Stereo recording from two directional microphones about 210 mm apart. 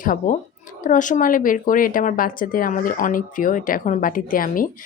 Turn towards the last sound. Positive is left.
turn(degrees=40)  # may be behind; listen again after turning